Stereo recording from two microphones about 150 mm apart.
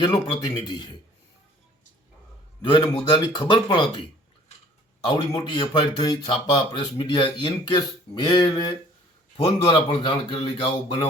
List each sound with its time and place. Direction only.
0.0 s speech: 30° left (ahead or behind)
2.6 s speech: 35° left (ahead or behind)
5.0 s speech: 30° left (ahead or behind)